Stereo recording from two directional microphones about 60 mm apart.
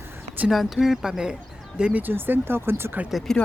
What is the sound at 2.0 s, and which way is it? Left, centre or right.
Speech, right.